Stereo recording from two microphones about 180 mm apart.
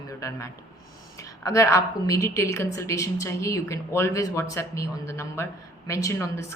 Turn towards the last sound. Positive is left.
turn(degrees=15)  # may be behind; listen again after turning